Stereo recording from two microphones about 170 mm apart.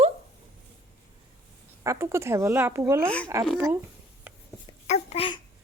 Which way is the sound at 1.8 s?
15° right (ahead or behind).